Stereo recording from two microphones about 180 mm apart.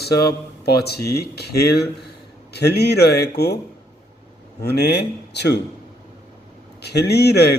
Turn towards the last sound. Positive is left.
turn(degrees=65)  # may be behind; listen again after turning